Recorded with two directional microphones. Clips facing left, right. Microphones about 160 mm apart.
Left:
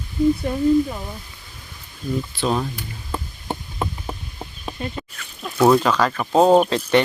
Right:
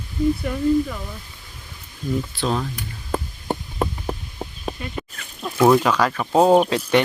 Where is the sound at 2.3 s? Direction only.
Centre (ahead or behind).